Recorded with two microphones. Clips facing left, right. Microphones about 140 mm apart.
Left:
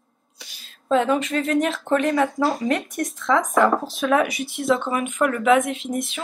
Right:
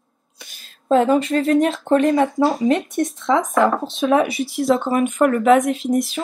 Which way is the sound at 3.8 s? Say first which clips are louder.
Right 3 dB; 25° right (ahead or behind).